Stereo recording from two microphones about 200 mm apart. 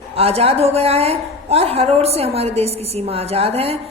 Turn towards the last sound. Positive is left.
turn(degrees=-30)  # may be behind; listen again after turning